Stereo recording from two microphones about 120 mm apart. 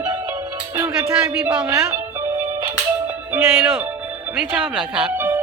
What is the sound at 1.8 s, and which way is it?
Music, 20° right (ahead or behind).